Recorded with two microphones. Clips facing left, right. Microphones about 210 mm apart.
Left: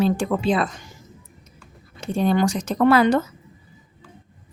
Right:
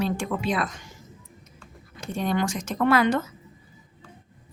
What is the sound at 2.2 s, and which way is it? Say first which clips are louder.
A woman's voice: left 6 dB; 35° left (ahead or behind).